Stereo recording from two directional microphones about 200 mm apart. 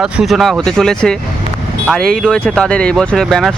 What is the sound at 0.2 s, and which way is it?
Speech, centre (ahead or behind).